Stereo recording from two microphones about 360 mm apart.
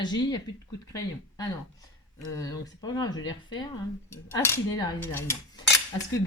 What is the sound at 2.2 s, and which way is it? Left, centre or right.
Speech, centre.